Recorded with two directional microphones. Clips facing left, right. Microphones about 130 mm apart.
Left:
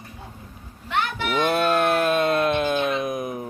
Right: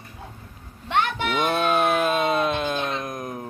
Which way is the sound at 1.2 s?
Centre (ahead or behind).